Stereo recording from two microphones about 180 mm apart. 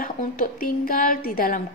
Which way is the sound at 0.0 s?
50° left (ahead or behind).